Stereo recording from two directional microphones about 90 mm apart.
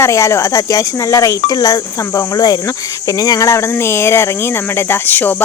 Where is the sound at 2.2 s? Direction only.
45° left (ahead or behind).